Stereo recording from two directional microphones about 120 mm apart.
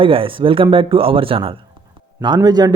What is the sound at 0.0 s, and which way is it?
Speech, 50° right (ahead or behind).